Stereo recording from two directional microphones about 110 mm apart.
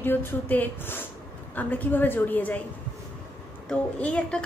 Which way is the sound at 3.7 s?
10° left (ahead or behind).